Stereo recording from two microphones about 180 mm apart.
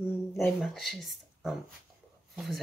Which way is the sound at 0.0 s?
15° left (ahead or behind).